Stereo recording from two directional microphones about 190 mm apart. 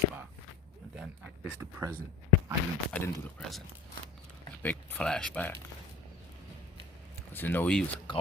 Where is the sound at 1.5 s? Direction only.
10° right (ahead or behind).